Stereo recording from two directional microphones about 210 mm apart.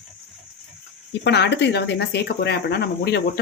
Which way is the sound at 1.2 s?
55° left (ahead or behind).